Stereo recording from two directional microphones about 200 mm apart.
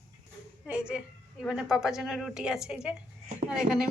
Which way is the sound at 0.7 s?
5° right (ahead or behind).